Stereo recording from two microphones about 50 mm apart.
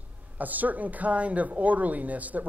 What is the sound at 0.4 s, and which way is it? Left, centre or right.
Speech, right.